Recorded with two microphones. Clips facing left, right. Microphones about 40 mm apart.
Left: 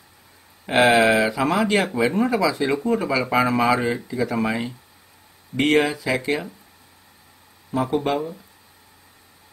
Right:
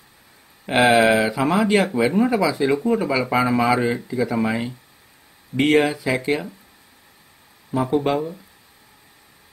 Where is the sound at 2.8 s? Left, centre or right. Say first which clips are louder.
Right 1 dB; centre.